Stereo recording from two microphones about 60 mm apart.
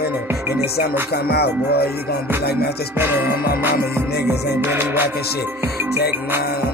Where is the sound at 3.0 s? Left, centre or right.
Right.